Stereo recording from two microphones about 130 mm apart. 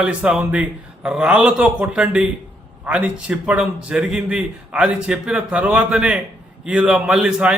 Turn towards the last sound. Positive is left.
turn(degrees=-5)  # may be behind; listen again after turning